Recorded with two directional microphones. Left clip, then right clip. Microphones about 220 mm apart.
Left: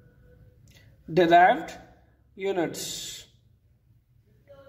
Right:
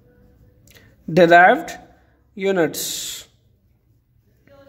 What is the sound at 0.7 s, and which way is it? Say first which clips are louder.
Speech: right 7 dB; 45° right (ahead or behind).